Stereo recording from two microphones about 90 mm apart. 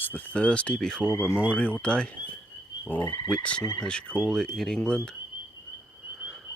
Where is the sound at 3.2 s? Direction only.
10° left (ahead or behind).